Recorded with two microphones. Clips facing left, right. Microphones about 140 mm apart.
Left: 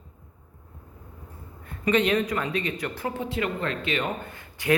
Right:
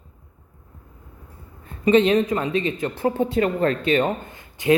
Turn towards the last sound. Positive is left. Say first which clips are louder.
# right 6 dB
turn(degrees=-20)  # may be behind; listen again after turning